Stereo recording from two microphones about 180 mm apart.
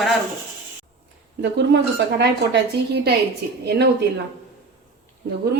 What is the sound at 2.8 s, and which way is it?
Speech, 65° right (ahead or behind).